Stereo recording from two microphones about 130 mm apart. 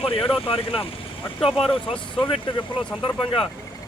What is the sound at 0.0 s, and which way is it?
Speech, 45° left (ahead or behind).